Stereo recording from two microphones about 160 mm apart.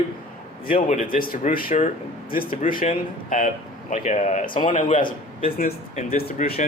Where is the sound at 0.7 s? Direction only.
60° left (ahead or behind).